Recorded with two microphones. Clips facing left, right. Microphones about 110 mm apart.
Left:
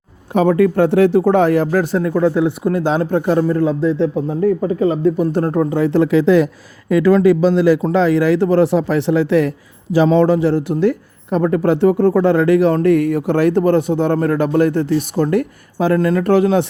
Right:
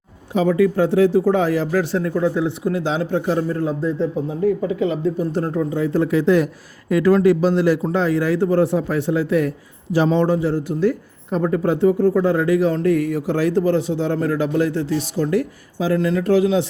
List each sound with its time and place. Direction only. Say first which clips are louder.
0.3 s speech: left 3 dB; 55° left (ahead or behind)
2.1 s speech: left 6 dB; 65° left (ahead or behind)
4.3 s speech: left 3 dB; 40° left (ahead or behind)
5.0 s speech: left 5 dB; 65° left (ahead or behind); by 6.2 s 90° left
7.8 s speech: left 5 dB; 90° left; by 16.6 s 55° left (ahead or behind)